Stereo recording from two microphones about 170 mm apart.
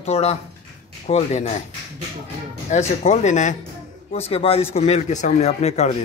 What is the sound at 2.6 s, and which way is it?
Speech, 40° left (ahead or behind).